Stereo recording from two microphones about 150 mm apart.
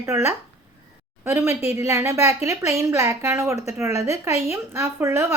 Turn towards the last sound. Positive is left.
turn(degrees=-20)  # may be behind; listen again after turning